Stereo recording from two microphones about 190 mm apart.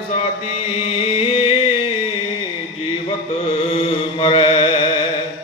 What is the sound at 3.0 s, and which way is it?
Chant, 25° left (ahead or behind).